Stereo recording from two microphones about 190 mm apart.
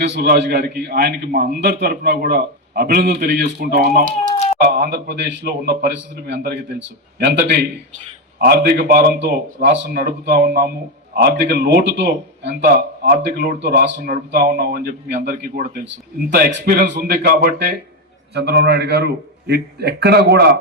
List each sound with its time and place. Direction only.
0.0 s a man's voice: 65° right (ahead or behind)
8.4 s a man's voice: 55° right (ahead or behind)